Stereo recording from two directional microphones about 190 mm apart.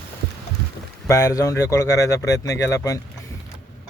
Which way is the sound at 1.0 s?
15° left (ahead or behind).